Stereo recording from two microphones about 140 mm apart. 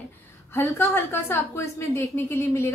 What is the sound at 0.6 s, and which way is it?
A woman's voice, 15° left (ahead or behind).